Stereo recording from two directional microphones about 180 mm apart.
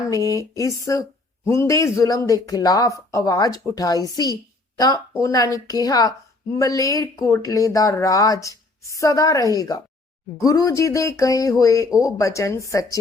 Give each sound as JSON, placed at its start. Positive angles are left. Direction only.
{"t": 0.1, "sound": "speech", "side_deg": 20}